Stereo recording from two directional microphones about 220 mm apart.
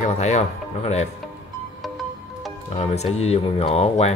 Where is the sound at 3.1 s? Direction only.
30° left (ahead or behind).